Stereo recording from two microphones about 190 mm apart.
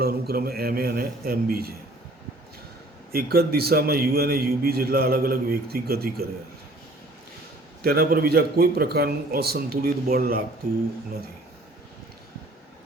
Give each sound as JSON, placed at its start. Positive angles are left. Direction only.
{"t": 0.0, "sound": "a man's voice", "side_deg": -55}
{"t": 3.1, "sound": "a man's voice", "side_deg": -55}
{"t": 7.8, "sound": "a man's voice", "side_deg": -50}